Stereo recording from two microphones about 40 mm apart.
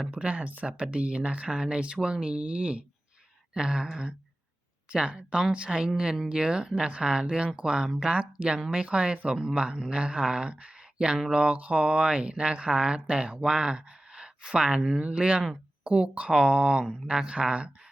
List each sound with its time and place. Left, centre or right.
0.2 s speech: right
4.9 s speech: right